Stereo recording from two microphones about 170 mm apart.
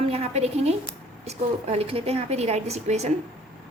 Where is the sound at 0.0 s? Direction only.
35° right (ahead or behind).